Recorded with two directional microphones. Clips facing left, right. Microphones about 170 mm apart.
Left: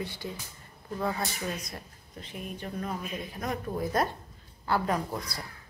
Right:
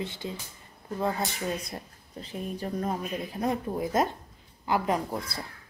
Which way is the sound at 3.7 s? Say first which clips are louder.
Right 2 dB; 20° right (ahead or behind).